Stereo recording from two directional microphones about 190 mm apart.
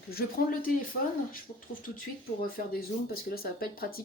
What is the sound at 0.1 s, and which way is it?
Speech, 50° left (ahead or behind).